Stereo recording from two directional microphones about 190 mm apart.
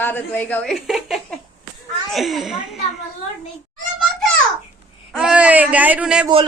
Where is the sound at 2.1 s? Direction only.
Centre (ahead or behind).